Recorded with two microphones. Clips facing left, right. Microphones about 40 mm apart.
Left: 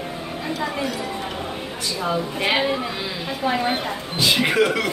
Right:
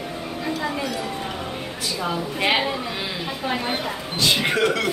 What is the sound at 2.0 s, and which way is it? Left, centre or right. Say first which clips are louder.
Speech: left 1 dB; centre.